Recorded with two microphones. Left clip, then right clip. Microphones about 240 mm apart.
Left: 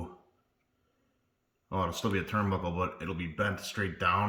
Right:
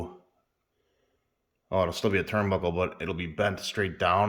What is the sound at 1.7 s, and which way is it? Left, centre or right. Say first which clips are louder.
Speech: right 6 dB; centre.